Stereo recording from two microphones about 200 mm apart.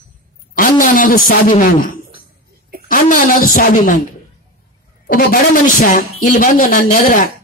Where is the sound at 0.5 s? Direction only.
40° left (ahead or behind).